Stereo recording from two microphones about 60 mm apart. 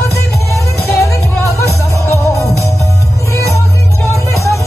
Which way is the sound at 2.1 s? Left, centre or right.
Left.